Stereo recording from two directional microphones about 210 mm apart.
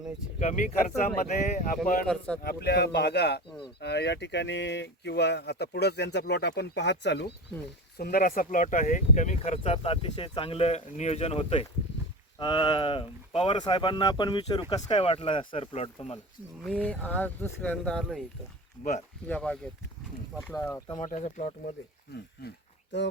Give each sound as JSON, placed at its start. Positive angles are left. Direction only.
{"t": 0.3, "sound": "speech", "side_deg": 35}
{"t": 2.0, "sound": "speech", "side_deg": 5}
{"t": 2.4, "sound": "speech", "side_deg": 45}
{"t": 16.6, "sound": "speech", "side_deg": 5}
{"t": 18.8, "sound": "speech", "side_deg": 35}
{"t": 19.3, "sound": "speech", "side_deg": 5}
{"t": 21.0, "sound": "speech", "side_deg": 35}
{"t": 22.1, "sound": "speech", "side_deg": 55}